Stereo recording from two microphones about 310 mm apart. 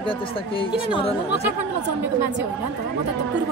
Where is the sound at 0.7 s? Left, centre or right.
Centre.